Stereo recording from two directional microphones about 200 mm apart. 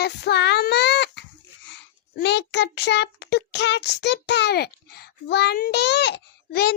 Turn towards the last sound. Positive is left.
turn(degrees=50)  # may be behind; listen again after turning